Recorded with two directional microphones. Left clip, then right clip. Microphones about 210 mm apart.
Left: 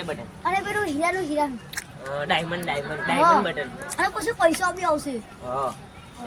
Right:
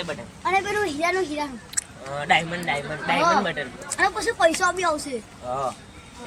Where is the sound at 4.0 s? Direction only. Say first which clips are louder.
Right 1 dB; 15° left (ahead or behind).